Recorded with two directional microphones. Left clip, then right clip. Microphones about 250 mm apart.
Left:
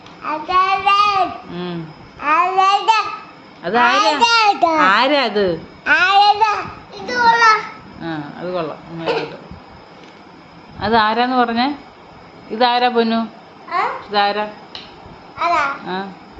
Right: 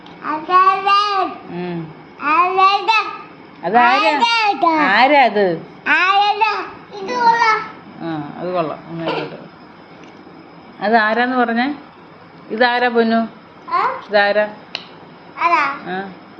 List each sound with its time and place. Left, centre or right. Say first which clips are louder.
0.2 s child singing: right 2 dB; centre
2.2 s a child's voice: right 1 dB; centre
5.3 s a sound: right 1 dB; centre
6.9 s children playing: left 1 dB; left
8.0 s a sound: right 1 dB; centre
10.8 s speech: even; centre
13.7 s babbling: right 2 dB; centre
15.4 s speech: right 2 dB; centre